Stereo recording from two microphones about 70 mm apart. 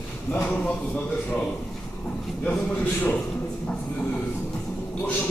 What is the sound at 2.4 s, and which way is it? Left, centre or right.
Speech, centre.